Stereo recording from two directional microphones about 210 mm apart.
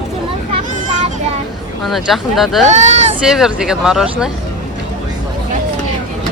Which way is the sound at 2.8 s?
35° right (ahead or behind).